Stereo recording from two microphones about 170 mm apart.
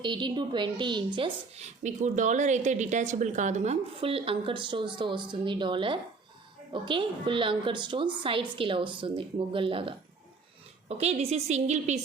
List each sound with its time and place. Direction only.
0.0 s a woman's voice: 30° right (ahead or behind)